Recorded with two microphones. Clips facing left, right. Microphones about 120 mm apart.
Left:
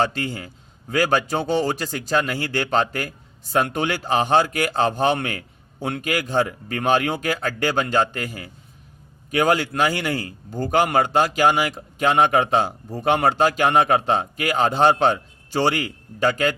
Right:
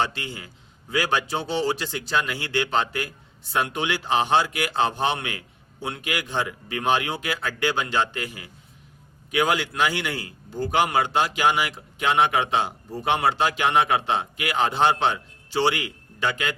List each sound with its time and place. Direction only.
0.0 s a man's voice: 45° left (ahead or behind)